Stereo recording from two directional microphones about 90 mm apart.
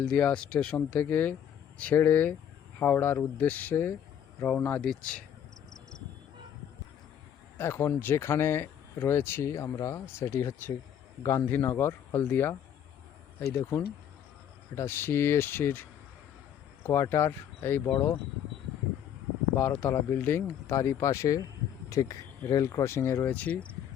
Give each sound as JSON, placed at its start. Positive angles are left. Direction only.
{"t": 0.0, "sound": "speech", "side_deg": 15}
{"t": 4.8, "sound": "speech", "side_deg": 10}
{"t": 7.6, "sound": "speech", "side_deg": 30}
{"t": 19.5, "sound": "speech", "side_deg": 20}
{"t": 20.7, "sound": "speech", "side_deg": 35}